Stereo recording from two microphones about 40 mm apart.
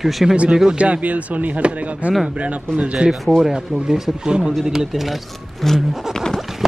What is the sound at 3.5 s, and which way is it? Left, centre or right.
Speech, centre.